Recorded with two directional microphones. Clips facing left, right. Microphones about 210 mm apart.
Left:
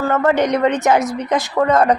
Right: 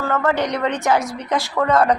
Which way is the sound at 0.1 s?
20° left (ahead or behind).